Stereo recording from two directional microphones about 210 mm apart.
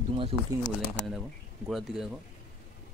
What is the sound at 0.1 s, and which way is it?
Speech, 25° right (ahead or behind).